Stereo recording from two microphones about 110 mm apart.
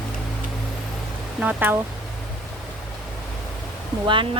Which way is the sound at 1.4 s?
15° right (ahead or behind).